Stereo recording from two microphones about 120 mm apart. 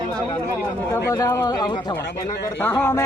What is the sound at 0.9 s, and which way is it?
Speech, 25° left (ahead or behind).